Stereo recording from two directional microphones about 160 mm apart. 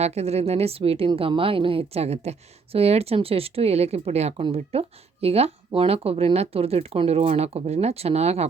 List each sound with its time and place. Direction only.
0.0 s speech: 40° right (ahead or behind)